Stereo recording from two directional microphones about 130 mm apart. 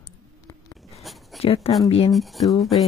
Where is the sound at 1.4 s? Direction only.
50° left (ahead or behind).